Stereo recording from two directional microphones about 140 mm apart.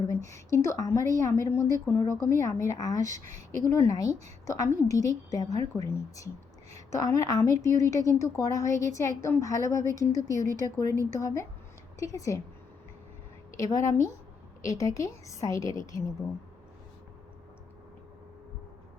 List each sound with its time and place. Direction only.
0.1 s a woman's voice: 20° left (ahead or behind)
13.6 s a woman's voice: 25° left (ahead or behind)